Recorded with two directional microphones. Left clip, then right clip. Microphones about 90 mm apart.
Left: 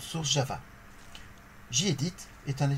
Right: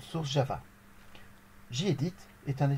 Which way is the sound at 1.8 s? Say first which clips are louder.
Left 1 dB; 10° right (ahead or behind).